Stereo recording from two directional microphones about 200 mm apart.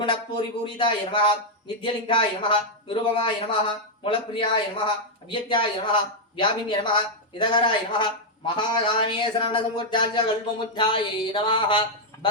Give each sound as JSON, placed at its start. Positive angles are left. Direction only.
{"t": 0.0, "sound": "speech", "side_deg": 25}